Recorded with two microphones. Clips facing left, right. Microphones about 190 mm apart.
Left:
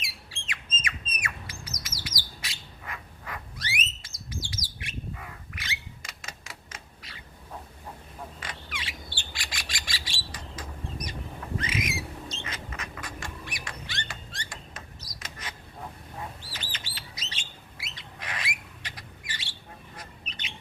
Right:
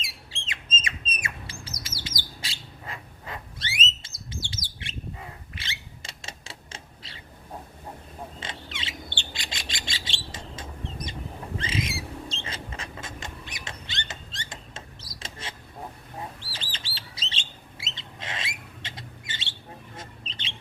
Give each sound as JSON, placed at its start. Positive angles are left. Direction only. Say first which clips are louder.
{"t": 0.0, "sound": "bird", "louder": "right 2 dB", "side_deg": -25}
{"t": 8.4, "sound": "bird", "louder": "right 2 dB", "side_deg": -25}
{"t": 11.5, "sound": "mouse", "louder": "right 1 dB", "side_deg": -30}
{"t": 16.4, "sound": "bird", "louder": "even", "side_deg": -30}